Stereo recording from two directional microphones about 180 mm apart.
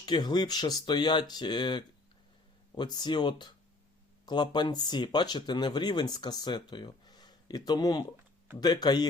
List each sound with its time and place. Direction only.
0.0 s speech: 25° left (ahead or behind)